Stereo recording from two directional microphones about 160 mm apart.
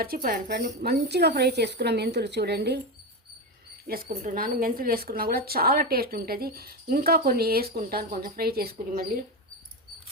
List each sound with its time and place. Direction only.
0.0 s speech: 65° right (ahead or behind)
0.8 s a woman's voice: 90° right
3.8 s speech: 60° right (ahead or behind)